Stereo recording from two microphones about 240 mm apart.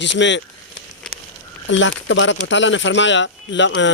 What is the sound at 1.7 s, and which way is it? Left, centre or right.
Speech, left.